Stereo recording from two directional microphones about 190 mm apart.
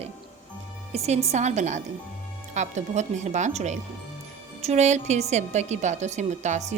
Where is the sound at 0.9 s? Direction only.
35° right (ahead or behind).